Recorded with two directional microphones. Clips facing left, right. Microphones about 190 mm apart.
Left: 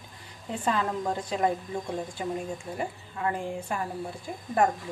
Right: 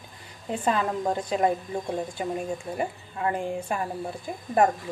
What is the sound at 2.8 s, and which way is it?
A woman's voice, 20° right (ahead or behind).